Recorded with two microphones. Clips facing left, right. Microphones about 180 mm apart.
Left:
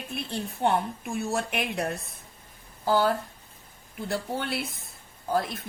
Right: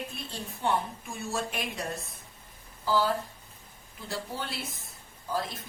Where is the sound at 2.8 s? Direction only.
60° left (ahead or behind).